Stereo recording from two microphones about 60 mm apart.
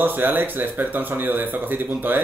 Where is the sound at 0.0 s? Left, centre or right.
Right.